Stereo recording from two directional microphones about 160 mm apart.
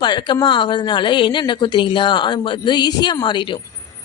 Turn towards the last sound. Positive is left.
turn(degrees=30)  # may be behind; listen again after turning